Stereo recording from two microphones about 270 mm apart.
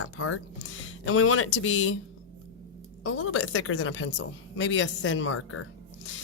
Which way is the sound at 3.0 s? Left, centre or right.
Left.